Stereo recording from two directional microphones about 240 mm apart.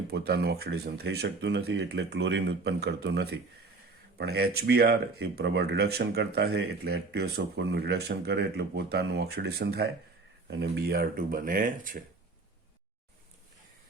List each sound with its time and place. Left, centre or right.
0.1 s speech: right